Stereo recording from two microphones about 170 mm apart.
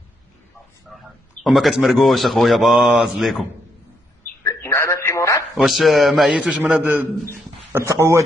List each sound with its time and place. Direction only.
1.4 s a man's voice: centre (ahead or behind)
4.4 s telephone: 15° left (ahead or behind)
5.5 s a man's voice: centre (ahead or behind); by 8.2 s 15° right (ahead or behind)